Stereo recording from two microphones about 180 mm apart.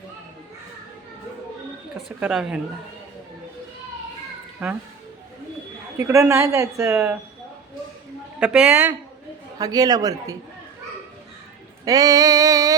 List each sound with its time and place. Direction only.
2.0 s speech: 5° right (ahead or behind)
4.6 s speech: 5° right (ahead or behind)
6.0 s speech: 15° right (ahead or behind)
8.4 s speech: 5° right (ahead or behind)
9.6 s a sound: 20° right (ahead or behind)
11.9 s a sound: 20° right (ahead or behind)